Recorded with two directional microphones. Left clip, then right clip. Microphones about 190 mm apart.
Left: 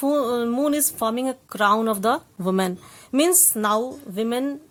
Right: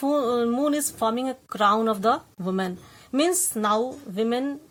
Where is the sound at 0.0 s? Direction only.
25° left (ahead or behind).